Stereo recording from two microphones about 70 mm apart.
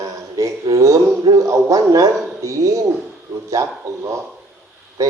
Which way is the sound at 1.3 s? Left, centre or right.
Right.